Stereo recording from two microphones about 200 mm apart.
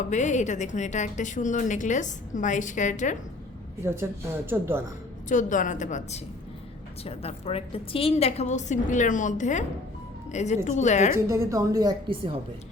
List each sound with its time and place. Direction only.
0.1 s a woman's voice: 35° left (ahead or behind)
3.8 s a woman's voice: 10° right (ahead or behind)
5.3 s a woman's voice: 40° left (ahead or behind)
11.1 s a woman's voice: 15° right (ahead or behind)